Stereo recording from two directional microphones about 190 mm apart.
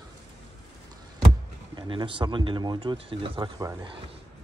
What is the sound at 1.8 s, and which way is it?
Speech, 25° right (ahead or behind).